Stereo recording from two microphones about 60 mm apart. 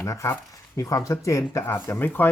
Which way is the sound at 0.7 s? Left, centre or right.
Left.